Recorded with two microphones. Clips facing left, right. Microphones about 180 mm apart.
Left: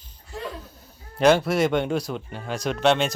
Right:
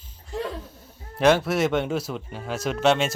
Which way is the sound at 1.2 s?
Centre (ahead or behind).